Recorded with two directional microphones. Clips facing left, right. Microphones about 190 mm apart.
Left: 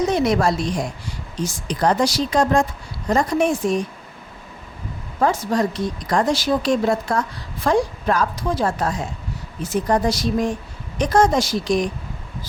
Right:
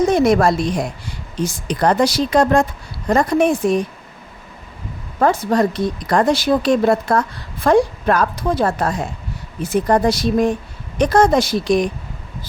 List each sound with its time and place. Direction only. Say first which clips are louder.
0.0 s a woman's voice: right 4 dB; 50° right (ahead or behind)
5.2 s a woman's voice: right 4 dB; 60° right (ahead or behind)